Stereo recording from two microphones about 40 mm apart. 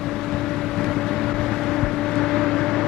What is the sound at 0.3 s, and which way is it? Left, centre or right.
Vehicle, centre.